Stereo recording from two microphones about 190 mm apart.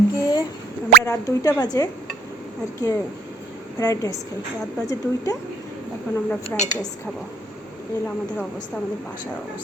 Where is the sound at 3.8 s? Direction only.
20° left (ahead or behind).